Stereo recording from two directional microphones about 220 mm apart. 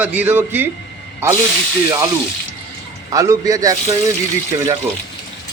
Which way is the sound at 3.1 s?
15° right (ahead or behind).